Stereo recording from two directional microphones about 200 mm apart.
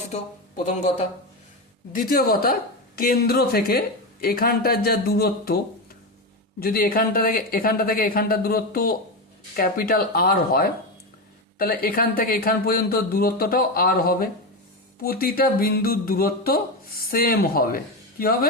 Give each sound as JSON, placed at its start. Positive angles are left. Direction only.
{"t": 0.1, "sound": "a woman's voice", "side_deg": 35}
{"t": 6.6, "sound": "a woman's voice", "side_deg": 45}